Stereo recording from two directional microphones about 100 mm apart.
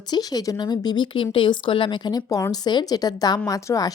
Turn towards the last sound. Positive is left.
turn(degrees=35)  # may be behind; listen again after turning